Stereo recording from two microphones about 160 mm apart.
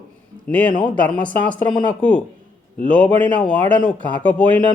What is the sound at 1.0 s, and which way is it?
Speech, 10° left (ahead or behind).